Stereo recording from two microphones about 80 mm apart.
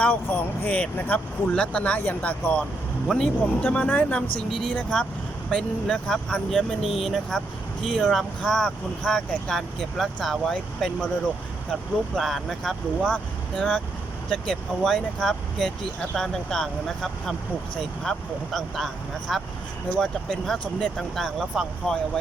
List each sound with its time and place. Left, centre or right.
0.0 s speech: left
3.1 s speech: centre
3.6 s speech: centre
4.4 s speech: centre
4.7 s speech: centre
13.6 s speech: centre